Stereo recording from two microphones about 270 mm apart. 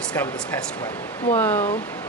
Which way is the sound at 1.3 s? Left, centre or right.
Centre.